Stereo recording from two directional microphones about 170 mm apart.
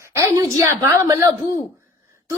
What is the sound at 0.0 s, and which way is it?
A woman's voice, 15° right (ahead or behind).